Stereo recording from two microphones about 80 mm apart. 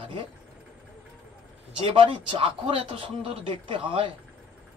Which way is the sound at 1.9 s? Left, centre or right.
Right.